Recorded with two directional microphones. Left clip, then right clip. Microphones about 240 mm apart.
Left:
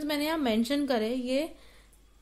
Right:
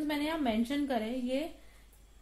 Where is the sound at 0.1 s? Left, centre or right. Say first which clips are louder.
Left 6 dB; left.